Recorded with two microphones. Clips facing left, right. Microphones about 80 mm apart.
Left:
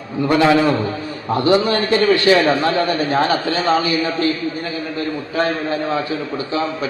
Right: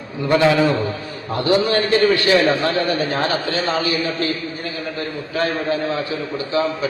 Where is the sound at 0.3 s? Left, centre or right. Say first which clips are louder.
Left 1 dB; left.